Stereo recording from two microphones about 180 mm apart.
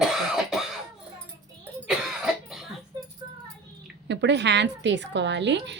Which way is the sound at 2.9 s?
25° right (ahead or behind).